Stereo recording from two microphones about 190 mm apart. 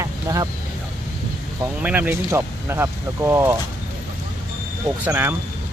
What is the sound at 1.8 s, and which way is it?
Speech, 10° right (ahead or behind).